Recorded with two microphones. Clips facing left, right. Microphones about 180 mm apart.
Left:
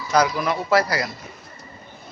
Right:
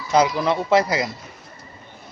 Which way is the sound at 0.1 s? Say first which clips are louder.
Right 2 dB; 25° right (ahead or behind).